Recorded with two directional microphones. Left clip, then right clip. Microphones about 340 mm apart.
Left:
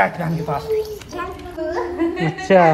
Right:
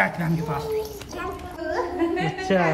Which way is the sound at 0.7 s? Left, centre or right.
Centre.